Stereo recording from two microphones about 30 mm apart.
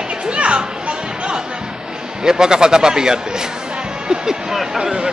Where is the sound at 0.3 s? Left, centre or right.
Right.